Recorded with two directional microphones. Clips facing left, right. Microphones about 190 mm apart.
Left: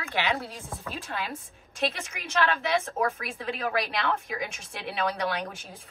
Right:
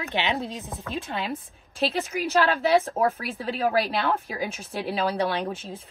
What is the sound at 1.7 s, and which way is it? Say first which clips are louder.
A woman's voice: right 5 dB; 35° right (ahead or behind).